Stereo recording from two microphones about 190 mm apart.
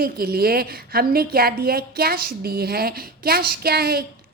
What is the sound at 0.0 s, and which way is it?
A woman's voice, 55° right (ahead or behind).